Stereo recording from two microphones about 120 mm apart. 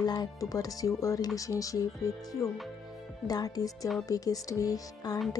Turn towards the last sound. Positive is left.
turn(degrees=30)  # may be behind; listen again after turning